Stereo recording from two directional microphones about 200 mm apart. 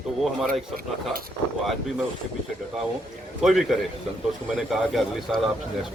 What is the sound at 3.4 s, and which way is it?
A man's voice, centre (ahead or behind).